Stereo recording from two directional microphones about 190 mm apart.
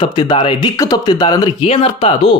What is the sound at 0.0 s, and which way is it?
Speech, 25° left (ahead or behind).